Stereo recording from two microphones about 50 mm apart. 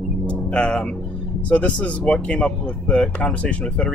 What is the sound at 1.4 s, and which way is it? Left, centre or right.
Speech, left.